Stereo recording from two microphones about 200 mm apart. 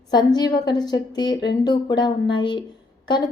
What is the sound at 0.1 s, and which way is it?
A woman's voice, 20° left (ahead or behind).